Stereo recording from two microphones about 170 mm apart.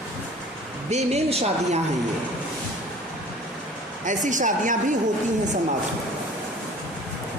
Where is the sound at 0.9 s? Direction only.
40° right (ahead or behind).